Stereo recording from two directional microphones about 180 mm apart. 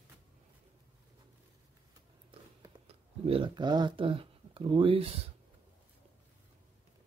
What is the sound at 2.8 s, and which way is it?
Speech, 30° right (ahead or behind).